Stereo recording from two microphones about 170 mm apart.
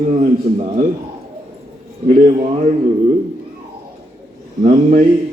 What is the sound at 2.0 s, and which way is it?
Speech, 40° right (ahead or behind).